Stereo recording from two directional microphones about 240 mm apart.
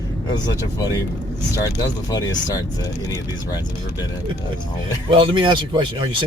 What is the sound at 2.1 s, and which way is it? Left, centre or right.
Speech, centre.